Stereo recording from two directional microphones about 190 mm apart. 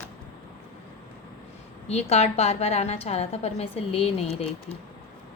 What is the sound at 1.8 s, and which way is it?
A woman's voice, 35° left (ahead or behind).